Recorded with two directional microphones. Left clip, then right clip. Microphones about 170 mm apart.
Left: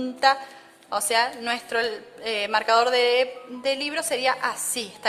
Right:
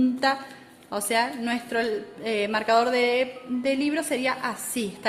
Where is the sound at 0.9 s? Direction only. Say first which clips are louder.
Left 2 dB; 40° left (ahead or behind).